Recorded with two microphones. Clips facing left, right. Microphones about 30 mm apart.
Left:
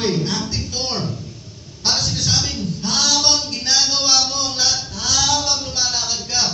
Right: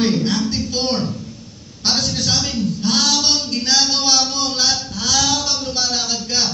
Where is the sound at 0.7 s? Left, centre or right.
Right.